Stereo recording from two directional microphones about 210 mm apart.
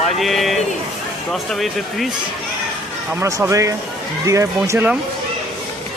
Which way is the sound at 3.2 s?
15° right (ahead or behind).